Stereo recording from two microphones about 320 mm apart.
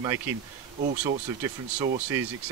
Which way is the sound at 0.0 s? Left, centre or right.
Centre.